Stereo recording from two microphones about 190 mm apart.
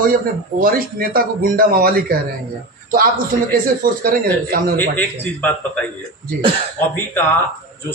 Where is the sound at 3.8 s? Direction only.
50° right (ahead or behind).